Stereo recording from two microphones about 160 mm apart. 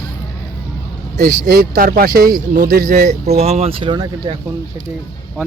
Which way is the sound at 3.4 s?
40° right (ahead or behind).